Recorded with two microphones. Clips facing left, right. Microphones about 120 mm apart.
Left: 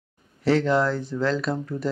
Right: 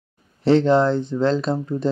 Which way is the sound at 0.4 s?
25° right (ahead or behind).